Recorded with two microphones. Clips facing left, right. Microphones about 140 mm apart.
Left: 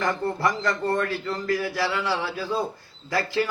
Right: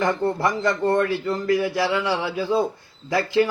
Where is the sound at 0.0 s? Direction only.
20° right (ahead or behind).